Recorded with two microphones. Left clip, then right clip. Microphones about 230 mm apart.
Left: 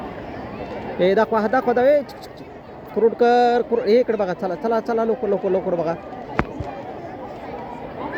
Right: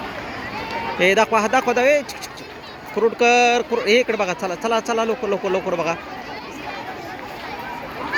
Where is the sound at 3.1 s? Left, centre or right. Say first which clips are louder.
Right 2 dB; right.